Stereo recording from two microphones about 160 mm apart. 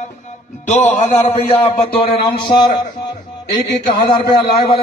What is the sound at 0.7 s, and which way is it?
Speech, 45° left (ahead or behind).